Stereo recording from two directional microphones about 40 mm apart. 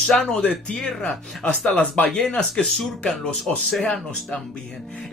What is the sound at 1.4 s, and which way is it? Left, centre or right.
A man's voice, left.